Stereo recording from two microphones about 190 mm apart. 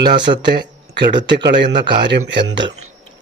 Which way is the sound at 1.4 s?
65° right (ahead or behind).